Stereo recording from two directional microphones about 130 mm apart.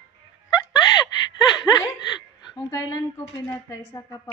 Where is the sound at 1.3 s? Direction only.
30° left (ahead or behind).